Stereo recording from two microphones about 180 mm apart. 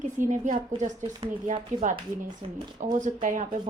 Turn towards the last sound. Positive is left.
turn(degrees=-45)  # may be behind; listen again after turning